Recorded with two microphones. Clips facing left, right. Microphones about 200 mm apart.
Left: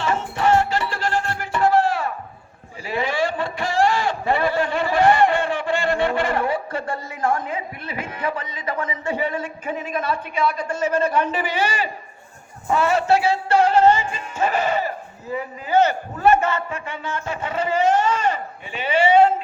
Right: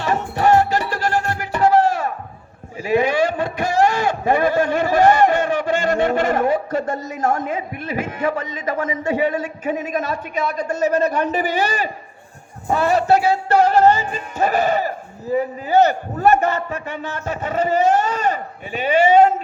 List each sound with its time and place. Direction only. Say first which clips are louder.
0.0 s music: right 3 dB; 40° right (ahead or behind)
2.8 s a man's voice: right 6 dB; 45° right (ahead or behind)
12.6 s music: right 2 dB; 35° right (ahead or behind)